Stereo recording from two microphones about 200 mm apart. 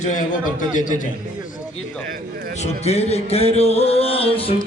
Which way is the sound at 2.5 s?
35° left (ahead or behind).